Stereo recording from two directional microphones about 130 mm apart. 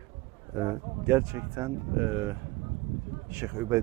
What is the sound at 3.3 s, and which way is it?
Speech, 20° right (ahead or behind).